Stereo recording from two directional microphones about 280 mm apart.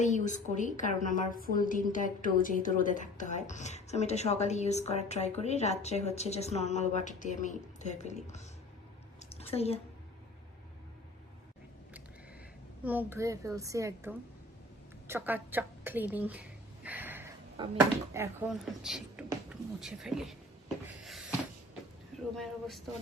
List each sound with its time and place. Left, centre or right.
0.0 s a woman's voice: left
9.4 s a woman's voice: left
12.8 s a child's voice: centre
21.0 s a sound: centre
22.4 s speech: centre